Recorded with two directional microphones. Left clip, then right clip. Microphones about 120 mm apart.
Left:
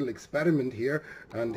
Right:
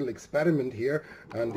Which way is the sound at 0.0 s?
40° left (ahead or behind).